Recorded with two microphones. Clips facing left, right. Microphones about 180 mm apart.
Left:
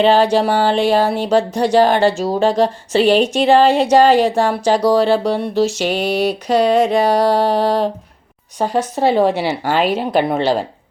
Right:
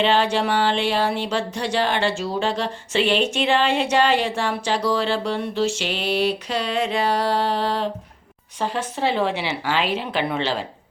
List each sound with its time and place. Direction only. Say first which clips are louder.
0.0 s speech: left 7 dB; 40° left (ahead or behind)